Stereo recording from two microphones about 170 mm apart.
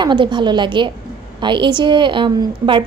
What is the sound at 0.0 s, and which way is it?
A woman's voice, 25° right (ahead or behind).